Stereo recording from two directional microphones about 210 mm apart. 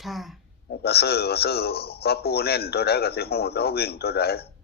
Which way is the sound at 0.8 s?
50° left (ahead or behind).